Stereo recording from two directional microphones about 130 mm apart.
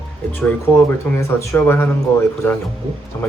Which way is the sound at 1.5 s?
15° left (ahead or behind).